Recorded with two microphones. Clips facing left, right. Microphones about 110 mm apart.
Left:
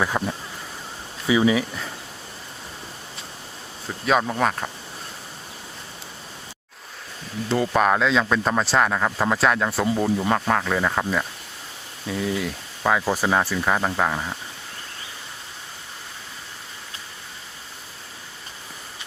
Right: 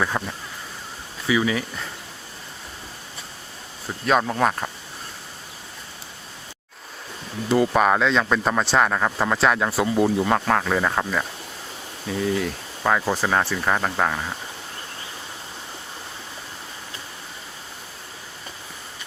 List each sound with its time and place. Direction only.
0.0 s speech: 5° left (ahead or behind)
1.3 s speech: 20° left (ahead or behind)
4.0 s speech: centre (ahead or behind)
7.4 s speech: 5° right (ahead or behind)